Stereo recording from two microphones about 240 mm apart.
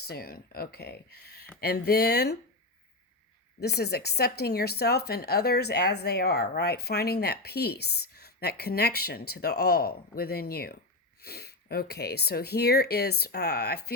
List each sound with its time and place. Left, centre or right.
0.0 s speech: left
3.6 s speech: left